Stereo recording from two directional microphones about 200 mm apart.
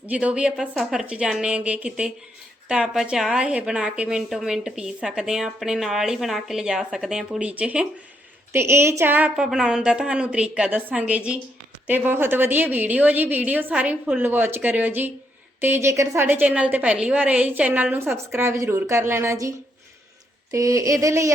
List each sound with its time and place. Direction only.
0.0 s a woman's voice: 5° right (ahead or behind)